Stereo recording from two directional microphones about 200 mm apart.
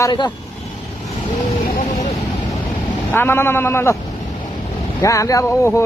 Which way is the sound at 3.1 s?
10° left (ahead or behind).